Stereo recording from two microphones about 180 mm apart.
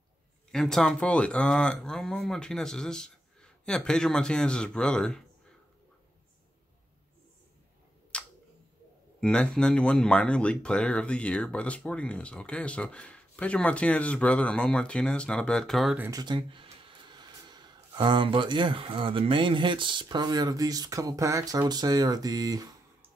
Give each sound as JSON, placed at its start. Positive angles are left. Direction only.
{"t": 0.5, "sound": "speech", "side_deg": 0}
{"t": 8.1, "sound": "tick", "side_deg": 5}
{"t": 9.2, "sound": "speech", "side_deg": 5}
{"t": 16.0, "sound": "speech", "side_deg": -20}